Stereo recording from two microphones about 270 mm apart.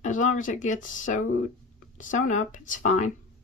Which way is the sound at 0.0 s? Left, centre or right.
Left.